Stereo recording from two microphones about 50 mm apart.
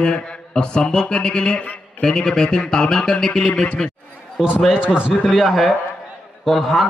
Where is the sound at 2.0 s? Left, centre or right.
Centre.